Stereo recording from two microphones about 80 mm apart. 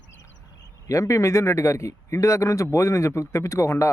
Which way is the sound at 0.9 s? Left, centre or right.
Left.